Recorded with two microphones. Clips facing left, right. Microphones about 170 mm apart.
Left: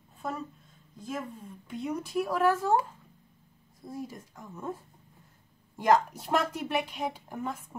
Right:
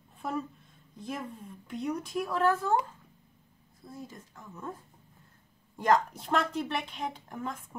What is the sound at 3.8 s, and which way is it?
Speech, 20° left (ahead or behind).